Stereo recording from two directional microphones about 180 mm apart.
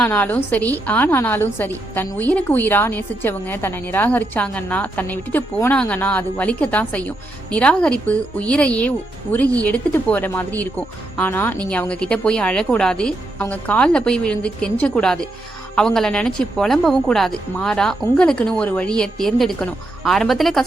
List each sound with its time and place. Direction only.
0.0 s a woman's voice: 10° left (ahead or behind)